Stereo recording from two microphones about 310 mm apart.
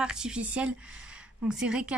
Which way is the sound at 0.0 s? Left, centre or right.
Centre.